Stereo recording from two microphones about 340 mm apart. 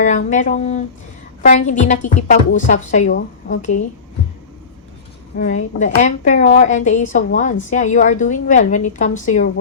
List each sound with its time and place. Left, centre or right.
0.0 s speech: left
5.4 s speech: left